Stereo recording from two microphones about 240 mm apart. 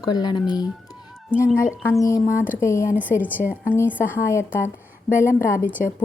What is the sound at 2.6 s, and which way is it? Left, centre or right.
A woman's voice, centre.